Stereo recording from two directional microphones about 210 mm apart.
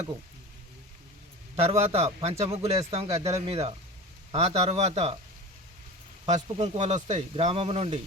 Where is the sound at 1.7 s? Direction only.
30° right (ahead or behind).